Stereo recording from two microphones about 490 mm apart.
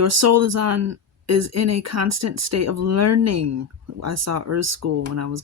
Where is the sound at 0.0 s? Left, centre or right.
Right.